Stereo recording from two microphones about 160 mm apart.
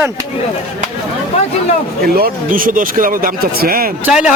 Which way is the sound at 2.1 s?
65° right (ahead or behind).